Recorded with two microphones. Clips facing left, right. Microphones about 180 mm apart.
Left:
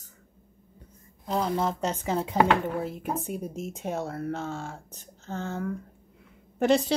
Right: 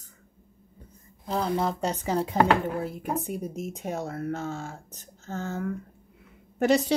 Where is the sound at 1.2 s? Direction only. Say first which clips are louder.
Even; centre (ahead or behind).